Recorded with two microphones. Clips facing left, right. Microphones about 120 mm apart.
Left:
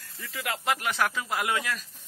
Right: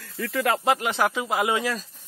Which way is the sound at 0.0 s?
90° right.